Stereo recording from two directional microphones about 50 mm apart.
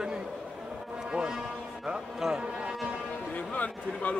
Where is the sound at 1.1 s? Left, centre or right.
Centre.